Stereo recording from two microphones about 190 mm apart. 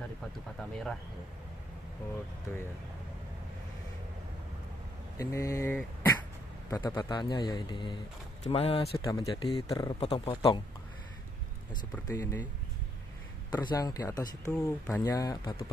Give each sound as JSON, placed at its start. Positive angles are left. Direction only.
{"t": 5.1, "sound": "beatboxing", "side_deg": 15}
{"t": 6.7, "sound": "speech", "side_deg": 20}
{"t": 11.9, "sound": "speech", "side_deg": 15}
{"t": 13.5, "sound": "speech", "side_deg": 20}